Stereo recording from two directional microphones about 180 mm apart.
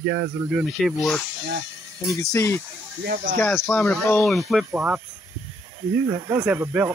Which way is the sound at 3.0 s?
55° right (ahead or behind).